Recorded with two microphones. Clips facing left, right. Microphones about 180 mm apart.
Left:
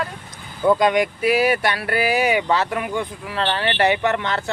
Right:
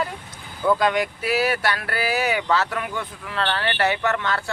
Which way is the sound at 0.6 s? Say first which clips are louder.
Left 4 dB; 15° left (ahead or behind).